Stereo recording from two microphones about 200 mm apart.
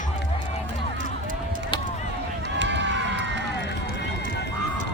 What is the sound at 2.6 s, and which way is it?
Run, 65° right (ahead or behind).